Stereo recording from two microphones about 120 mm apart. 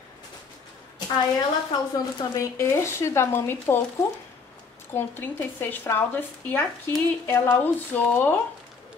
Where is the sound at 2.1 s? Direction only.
25° left (ahead or behind).